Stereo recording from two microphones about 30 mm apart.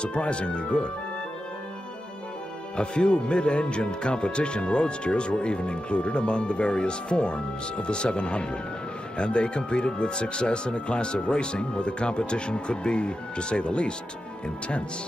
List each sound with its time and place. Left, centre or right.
0.0 s speech: left
2.7 s speech: left